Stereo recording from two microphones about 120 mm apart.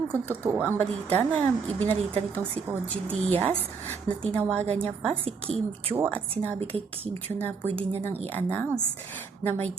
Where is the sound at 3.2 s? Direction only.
60° right (ahead or behind).